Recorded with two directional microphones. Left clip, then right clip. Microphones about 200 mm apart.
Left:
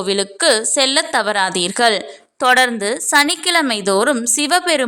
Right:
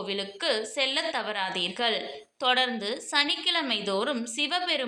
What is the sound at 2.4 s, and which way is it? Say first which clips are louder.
A woman's voice: left 12 dB; 50° left (ahead or behind).